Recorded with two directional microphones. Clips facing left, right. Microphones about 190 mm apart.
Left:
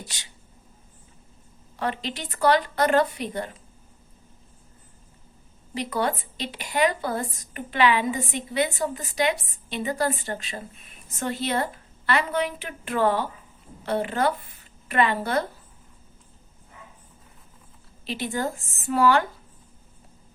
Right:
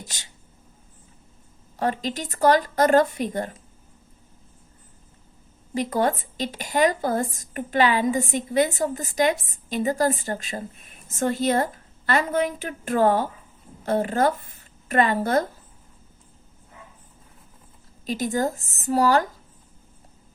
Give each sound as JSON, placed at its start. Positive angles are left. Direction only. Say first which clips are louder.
{"t": 0.0, "sound": "speech", "louder": "even", "side_deg": -45}
{"t": 1.7, "sound": "speech", "louder": "right 4 dB", "side_deg": -45}
{"t": 5.7, "sound": "speech", "louder": "right 4 dB", "side_deg": -45}
{"t": 18.0, "sound": "a woman's voice", "louder": "right 4 dB", "side_deg": -40}